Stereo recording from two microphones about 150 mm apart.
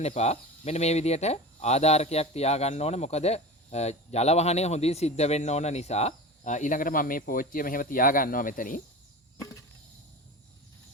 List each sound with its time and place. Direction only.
0.0 s speech: 45° left (ahead or behind); by 8.8 s 65° left (ahead or behind)